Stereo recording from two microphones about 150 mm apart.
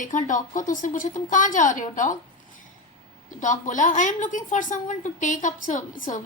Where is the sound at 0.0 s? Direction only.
60° left (ahead or behind).